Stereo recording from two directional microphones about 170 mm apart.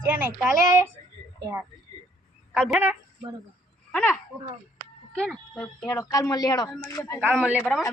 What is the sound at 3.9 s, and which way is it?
Speech, 5° left (ahead or behind).